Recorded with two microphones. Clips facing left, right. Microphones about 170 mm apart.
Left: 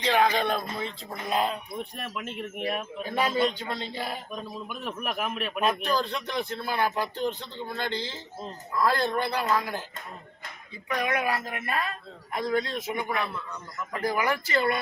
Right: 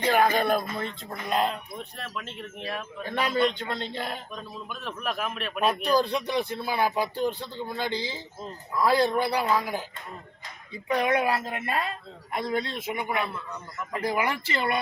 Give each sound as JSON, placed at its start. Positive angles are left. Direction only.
{"t": 0.1, "sound": "speech", "side_deg": -5}
{"t": 2.0, "sound": "a man's voice", "side_deg": 15}
{"t": 5.8, "sound": "speech", "side_deg": -10}
{"t": 10.8, "sound": "a woman's voice", "side_deg": -30}